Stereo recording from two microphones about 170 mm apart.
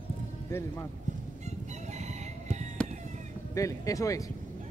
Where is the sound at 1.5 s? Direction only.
45° right (ahead or behind).